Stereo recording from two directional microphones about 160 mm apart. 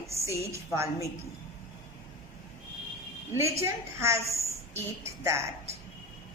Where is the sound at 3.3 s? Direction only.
15° right (ahead or behind).